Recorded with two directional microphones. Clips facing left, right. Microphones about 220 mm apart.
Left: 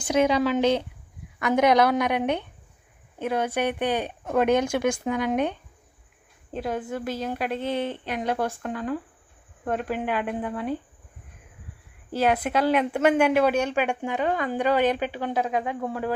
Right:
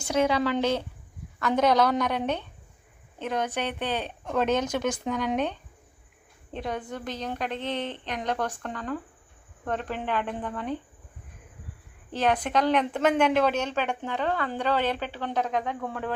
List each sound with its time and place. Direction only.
0.1 s a woman's voice: 15° left (ahead or behind)
12.1 s a woman's voice: 10° left (ahead or behind)